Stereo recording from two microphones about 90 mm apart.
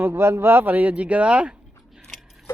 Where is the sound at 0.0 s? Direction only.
30° right (ahead or behind).